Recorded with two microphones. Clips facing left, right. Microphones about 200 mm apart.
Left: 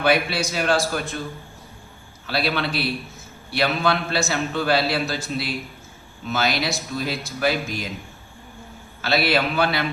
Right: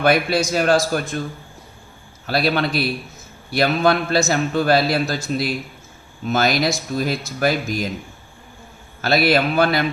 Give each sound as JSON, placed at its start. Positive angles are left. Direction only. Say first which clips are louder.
{"t": 0.0, "sound": "a man's voice", "louder": "right 3 dB", "side_deg": -45}
{"t": 2.2, "sound": "a man's voice", "louder": "right 4 dB", "side_deg": -45}
{"t": 9.0, "sound": "a man's voice", "louder": "right 4 dB", "side_deg": -45}